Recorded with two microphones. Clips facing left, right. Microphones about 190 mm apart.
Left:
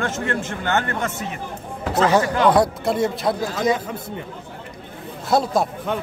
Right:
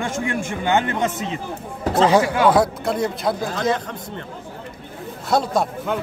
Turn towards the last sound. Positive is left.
turn(degrees=0)  # may be behind; listen again after turning